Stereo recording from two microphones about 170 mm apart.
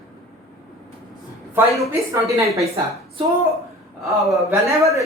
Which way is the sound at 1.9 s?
15° right (ahead or behind).